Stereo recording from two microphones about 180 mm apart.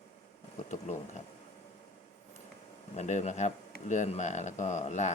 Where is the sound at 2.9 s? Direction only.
40° left (ahead or behind).